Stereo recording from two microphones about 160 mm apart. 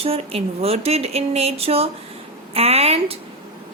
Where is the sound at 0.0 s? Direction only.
40° right (ahead or behind).